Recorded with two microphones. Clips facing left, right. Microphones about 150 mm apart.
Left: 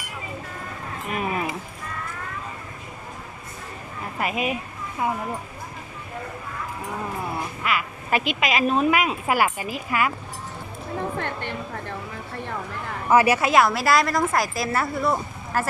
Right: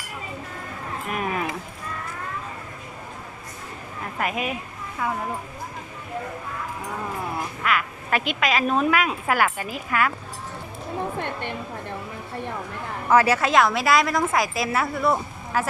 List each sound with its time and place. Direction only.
1.1 s a sound: centre (ahead or behind)
4.2 s a woman's voice: 5° left (ahead or behind)
5.0 s speech: 20° left (ahead or behind)
7.6 s speech: 5° left (ahead or behind)
13.1 s a woman's voice: 10° left (ahead or behind)